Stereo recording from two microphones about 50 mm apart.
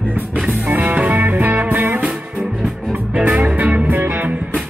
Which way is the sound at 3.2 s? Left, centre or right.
Right.